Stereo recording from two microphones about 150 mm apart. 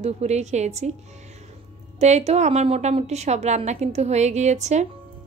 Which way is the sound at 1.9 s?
45° right (ahead or behind).